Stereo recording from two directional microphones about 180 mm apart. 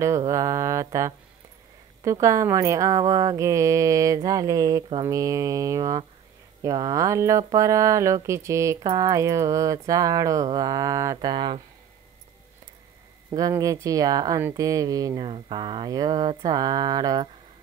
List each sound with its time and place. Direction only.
0.3 s speech: 15° right (ahead or behind)
13.3 s speech: 20° right (ahead or behind)